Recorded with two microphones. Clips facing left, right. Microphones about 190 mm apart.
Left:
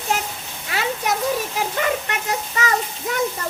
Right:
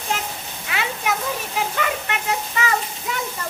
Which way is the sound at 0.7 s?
40° left (ahead or behind).